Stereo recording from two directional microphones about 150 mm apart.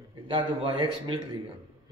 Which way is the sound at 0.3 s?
40° right (ahead or behind).